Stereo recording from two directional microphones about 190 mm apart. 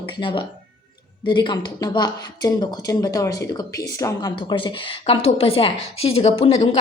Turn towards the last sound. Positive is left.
turn(degrees=30)  # may be behind; listen again after turning